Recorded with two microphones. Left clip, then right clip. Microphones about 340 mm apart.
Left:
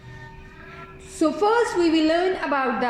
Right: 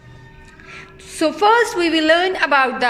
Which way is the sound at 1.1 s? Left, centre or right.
Right.